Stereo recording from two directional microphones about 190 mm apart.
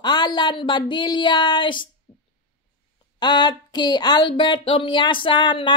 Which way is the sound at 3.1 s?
25° left (ahead or behind).